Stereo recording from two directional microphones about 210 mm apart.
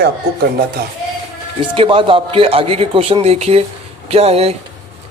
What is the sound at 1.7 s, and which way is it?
A man's voice, 25° right (ahead or behind).